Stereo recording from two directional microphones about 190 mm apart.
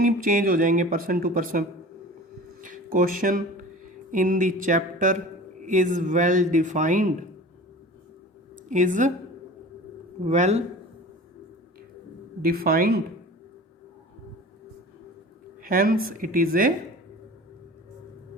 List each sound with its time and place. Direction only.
0.0 s speech: 45° right (ahead or behind)
2.6 s a sound: 45° right (ahead or behind)
4.1 s speech: 45° right (ahead or behind)
8.7 s speech: 40° right (ahead or behind)
10.2 s speech: 40° right (ahead or behind)
12.4 s speech: 50° right (ahead or behind)
15.6 s speech: 50° right (ahead or behind)